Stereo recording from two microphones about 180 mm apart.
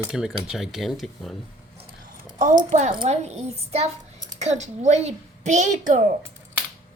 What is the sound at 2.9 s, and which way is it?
A child's voice, 30° right (ahead or behind).